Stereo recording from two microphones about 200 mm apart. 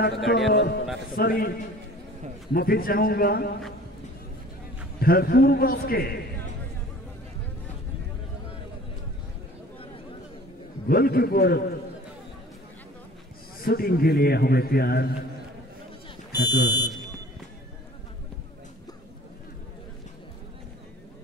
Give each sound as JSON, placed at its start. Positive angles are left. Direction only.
{"t": 0.5, "sound": "a man's voice", "side_deg": 60}
{"t": 1.1, "sound": "a man's voice", "side_deg": 45}
{"t": 2.5, "sound": "a man's voice", "side_deg": 50}
{"t": 5.0, "sound": "a man's voice", "side_deg": 50}
{"t": 10.9, "sound": "a man's voice", "side_deg": 50}
{"t": 13.7, "sound": "a man's voice", "side_deg": 50}
{"t": 16.3, "sound": "speech", "side_deg": 20}